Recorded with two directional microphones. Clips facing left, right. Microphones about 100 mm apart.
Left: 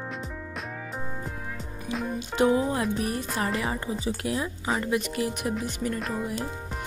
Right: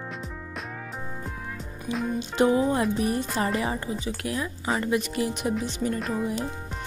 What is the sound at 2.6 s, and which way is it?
Speech, centre (ahead or behind).